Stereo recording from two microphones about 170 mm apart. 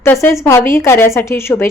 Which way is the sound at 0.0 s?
15° left (ahead or behind).